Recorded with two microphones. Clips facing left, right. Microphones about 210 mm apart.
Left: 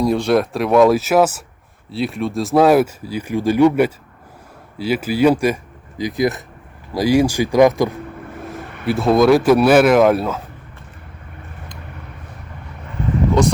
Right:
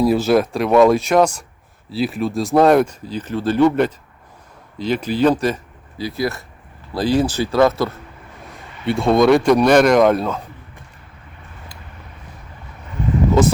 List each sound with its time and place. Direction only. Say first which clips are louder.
0.0 s speech: right 1 dB; 5° right (ahead or behind); by 7.9 s 15° left (ahead or behind)
8.9 s speech: left 1 dB; centre (ahead or behind)
13.4 s speech: right 1 dB; 5° right (ahead or behind)